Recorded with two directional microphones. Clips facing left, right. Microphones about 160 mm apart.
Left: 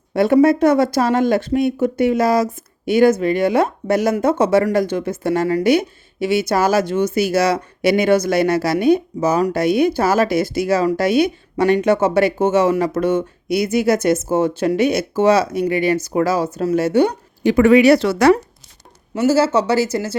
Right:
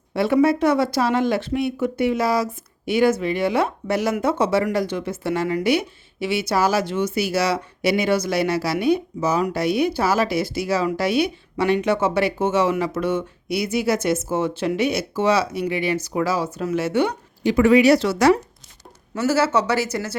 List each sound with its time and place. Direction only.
0.1 s speech: 45° left (ahead or behind)
17.4 s speech: 55° left (ahead or behind)
19.1 s speech: 30° left (ahead or behind)